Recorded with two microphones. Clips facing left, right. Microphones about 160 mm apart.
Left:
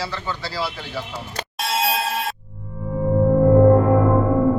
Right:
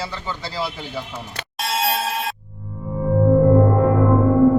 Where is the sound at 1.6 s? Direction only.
Centre (ahead or behind).